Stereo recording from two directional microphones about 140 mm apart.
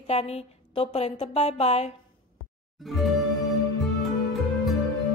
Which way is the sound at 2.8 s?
Centre (ahead or behind).